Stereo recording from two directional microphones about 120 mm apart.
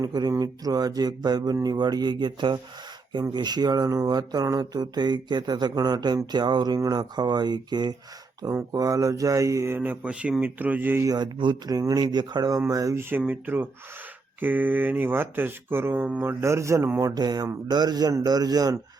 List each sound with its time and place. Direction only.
0.0 s speech: 30° right (ahead or behind); by 11.0 s 15° right (ahead or behind)
11.0 s speech: 35° right (ahead or behind)